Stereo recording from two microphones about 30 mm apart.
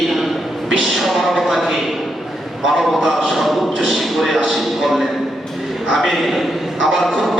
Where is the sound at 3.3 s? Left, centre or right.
Centre.